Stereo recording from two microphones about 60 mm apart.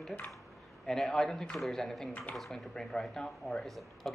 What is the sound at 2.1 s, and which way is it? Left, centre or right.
Speech, left.